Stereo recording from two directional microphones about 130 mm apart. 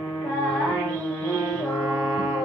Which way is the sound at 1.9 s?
15° right (ahead or behind).